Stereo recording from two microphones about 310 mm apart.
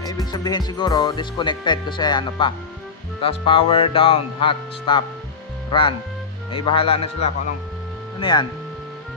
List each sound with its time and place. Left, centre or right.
0.0 s speech: centre